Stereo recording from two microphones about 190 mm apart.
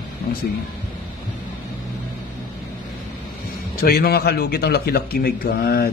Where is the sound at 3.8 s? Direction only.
55° left (ahead or behind).